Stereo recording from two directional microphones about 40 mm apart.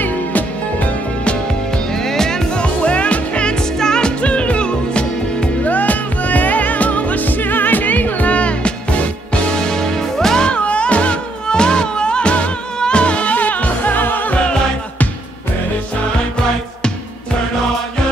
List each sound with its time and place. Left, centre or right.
0.0 s music: left
1.9 s music: centre
2.6 s music: left
3.5 s music: centre
4.2 s music: left
5.6 s music: left
9.5 s music: centre
10.4 s music: left
13.9 s music: left
14.3 s music: left